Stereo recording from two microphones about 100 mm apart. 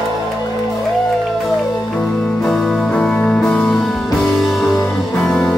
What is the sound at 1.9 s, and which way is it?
Music, 10° left (ahead or behind).